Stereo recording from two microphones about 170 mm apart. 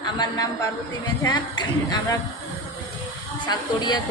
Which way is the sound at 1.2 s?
25° left (ahead or behind).